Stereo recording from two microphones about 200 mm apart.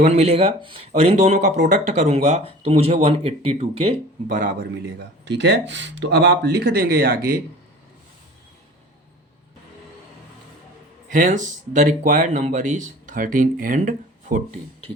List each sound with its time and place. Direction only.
0.0 s speech: 35° right (ahead or behind)
4.4 s a man's voice: 45° right (ahead or behind)
4.7 s speech: 60° right (ahead or behind)
11.1 s speech: 40° right (ahead or behind)